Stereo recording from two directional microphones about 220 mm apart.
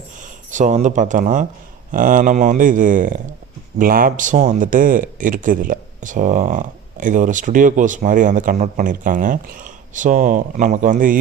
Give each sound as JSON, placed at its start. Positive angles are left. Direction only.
{"t": 0.5, "sound": "speech", "side_deg": -35}